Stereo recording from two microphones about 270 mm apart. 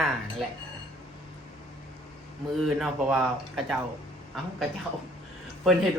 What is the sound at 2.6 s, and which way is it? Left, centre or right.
Speech, centre.